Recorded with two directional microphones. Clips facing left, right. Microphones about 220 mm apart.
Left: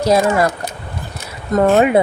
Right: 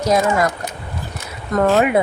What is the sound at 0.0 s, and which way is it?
Speech, 30° left (ahead or behind).